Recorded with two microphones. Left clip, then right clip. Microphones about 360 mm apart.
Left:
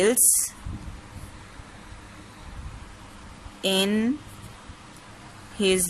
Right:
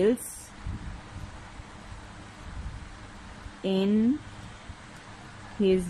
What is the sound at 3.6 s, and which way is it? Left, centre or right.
Speech, left.